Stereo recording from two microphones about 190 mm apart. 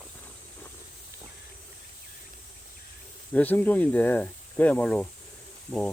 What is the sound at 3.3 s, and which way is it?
Speech, 10° left (ahead or behind).